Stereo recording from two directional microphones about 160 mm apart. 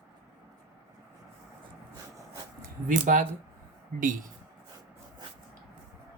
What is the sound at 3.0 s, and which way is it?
Speech, 50° right (ahead or behind).